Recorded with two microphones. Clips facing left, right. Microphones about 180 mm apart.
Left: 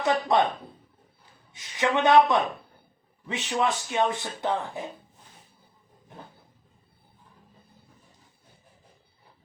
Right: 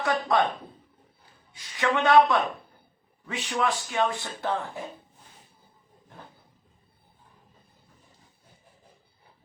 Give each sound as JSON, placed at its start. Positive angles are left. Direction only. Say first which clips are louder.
{"t": 0.0, "sound": "speech", "louder": "left 2 dB", "side_deg": 20}
{"t": 1.5, "sound": "speech", "louder": "left 1 dB", "side_deg": 20}
{"t": 3.2, "sound": "speech", "louder": "left 1 dB", "side_deg": 20}